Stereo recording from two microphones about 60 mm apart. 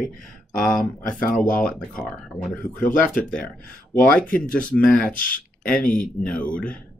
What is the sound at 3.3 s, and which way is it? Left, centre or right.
Speech, centre.